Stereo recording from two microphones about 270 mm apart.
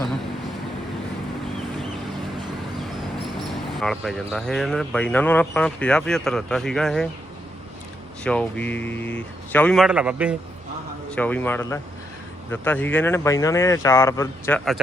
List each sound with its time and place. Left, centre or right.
3.8 s speech: centre
8.2 s speech: centre
11.1 s speech: centre